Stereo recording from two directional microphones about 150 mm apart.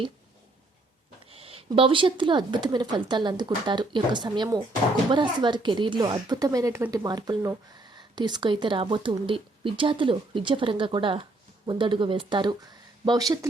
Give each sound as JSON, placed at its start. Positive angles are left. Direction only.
{"t": 1.3, "sound": "a woman's voice", "side_deg": -40}